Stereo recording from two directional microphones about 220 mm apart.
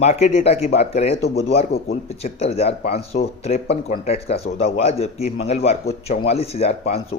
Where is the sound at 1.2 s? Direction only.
45° left (ahead or behind).